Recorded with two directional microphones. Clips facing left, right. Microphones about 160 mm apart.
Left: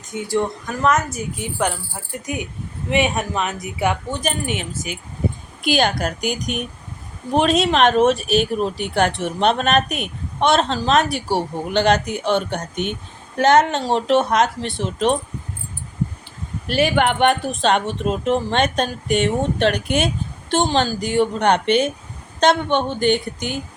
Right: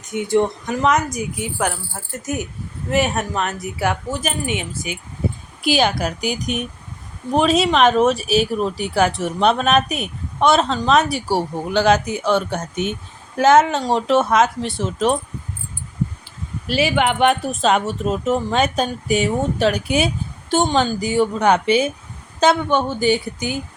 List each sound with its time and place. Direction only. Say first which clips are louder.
0.1 s speech: right 4 dB; 20° right (ahead or behind); by 15.2 s centre (ahead or behind)
16.8 s speech: even; centre (ahead or behind)